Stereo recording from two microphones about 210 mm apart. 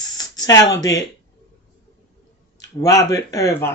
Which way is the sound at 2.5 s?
15° left (ahead or behind).